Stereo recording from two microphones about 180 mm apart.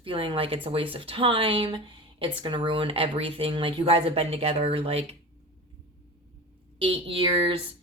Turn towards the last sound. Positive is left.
turn(degrees=-30)  # may be behind; listen again after turning